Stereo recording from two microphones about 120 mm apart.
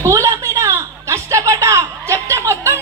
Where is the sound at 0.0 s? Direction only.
25° right (ahead or behind).